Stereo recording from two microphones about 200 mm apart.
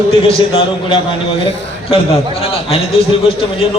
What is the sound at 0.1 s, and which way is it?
A man's voice, 25° left (ahead or behind).